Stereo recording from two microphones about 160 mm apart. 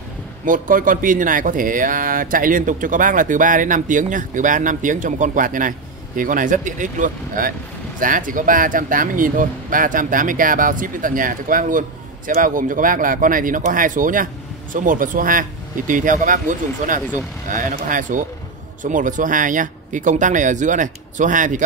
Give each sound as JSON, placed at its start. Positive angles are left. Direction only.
{"t": 0.5, "sound": "speech", "side_deg": -60}